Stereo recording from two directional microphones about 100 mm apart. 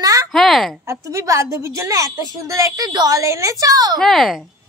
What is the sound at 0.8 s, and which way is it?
A woman's voice, 35° right (ahead or behind).